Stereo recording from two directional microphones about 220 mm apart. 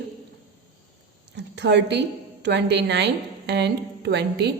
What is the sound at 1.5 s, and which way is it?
A woman's voice, 50° right (ahead or behind).